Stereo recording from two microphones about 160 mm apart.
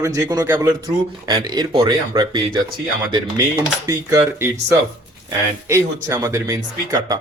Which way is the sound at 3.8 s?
20° right (ahead or behind).